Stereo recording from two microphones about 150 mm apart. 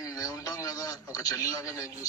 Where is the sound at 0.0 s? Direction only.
20° left (ahead or behind).